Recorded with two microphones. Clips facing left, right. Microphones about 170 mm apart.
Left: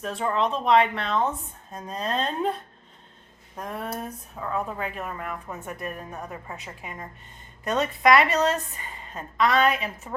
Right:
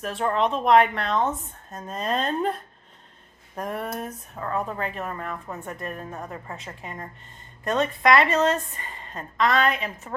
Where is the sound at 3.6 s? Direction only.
Centre (ahead or behind).